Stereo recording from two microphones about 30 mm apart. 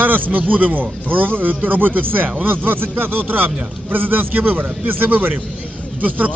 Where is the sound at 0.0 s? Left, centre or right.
Right.